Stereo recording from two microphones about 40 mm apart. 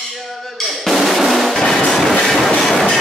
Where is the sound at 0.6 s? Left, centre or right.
Centre.